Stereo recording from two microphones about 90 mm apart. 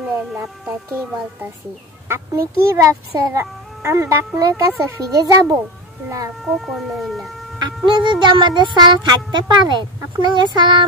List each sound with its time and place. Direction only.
2.0 s a child's voice: 30° right (ahead or behind)
6.4 s speech: 5° right (ahead or behind)
7.5 s speech: 55° right (ahead or behind)